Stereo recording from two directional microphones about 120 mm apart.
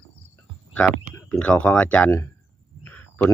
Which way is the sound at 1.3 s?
10° left (ahead or behind).